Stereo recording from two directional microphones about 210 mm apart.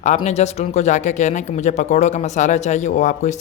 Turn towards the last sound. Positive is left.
turn(degrees=35)  # may be behind; listen again after turning